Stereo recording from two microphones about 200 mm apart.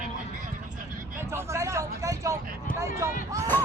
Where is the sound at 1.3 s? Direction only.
15° right (ahead or behind).